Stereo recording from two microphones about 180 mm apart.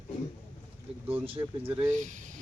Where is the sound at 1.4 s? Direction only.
20° right (ahead or behind).